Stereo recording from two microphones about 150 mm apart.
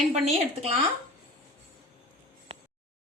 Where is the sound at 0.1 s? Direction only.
45° right (ahead or behind).